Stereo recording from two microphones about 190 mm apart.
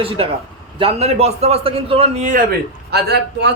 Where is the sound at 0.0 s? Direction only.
30° right (ahead or behind).